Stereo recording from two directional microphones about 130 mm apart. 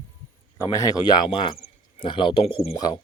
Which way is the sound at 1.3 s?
40° left (ahead or behind).